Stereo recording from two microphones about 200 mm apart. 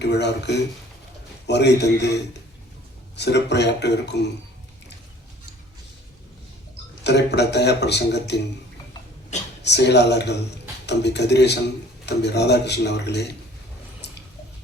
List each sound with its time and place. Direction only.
0.0 s a man's voice: 60° left (ahead or behind)
3.2 s a man's voice: 60° left (ahead or behind)
7.0 s a man's voice: 55° left (ahead or behind)
9.6 s a man's voice: 55° left (ahead or behind)